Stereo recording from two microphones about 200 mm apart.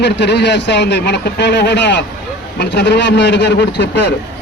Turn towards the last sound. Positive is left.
turn(degrees=60)  # may be behind; listen again after turning